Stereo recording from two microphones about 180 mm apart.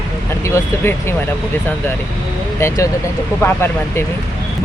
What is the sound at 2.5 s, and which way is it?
Speech, 15° left (ahead or behind).